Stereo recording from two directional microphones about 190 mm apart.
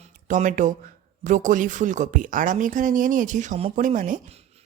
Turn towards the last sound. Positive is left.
turn(degrees=-40)  # may be behind; listen again after turning